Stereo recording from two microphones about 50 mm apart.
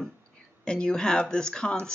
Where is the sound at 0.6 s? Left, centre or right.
Centre.